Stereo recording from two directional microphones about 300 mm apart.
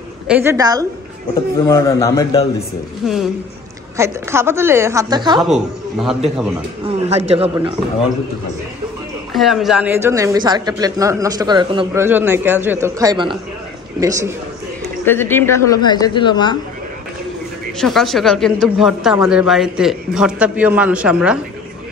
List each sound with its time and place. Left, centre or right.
0.3 s speech: centre
1.7 s a woman's voice: centre
3.0 s a man's voice: centre
5.4 s a man's voice: centre
6.9 s speech: right
9.3 s speech: centre
15.0 s a woman's voice: centre
17.7 s a man's voice: centre